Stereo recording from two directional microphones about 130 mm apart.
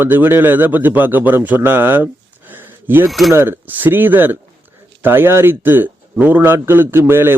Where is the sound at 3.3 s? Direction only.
15° right (ahead or behind).